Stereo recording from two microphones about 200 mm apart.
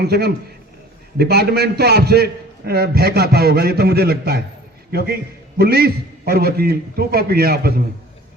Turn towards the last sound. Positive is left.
turn(degrees=-50)  # may be behind; listen again after turning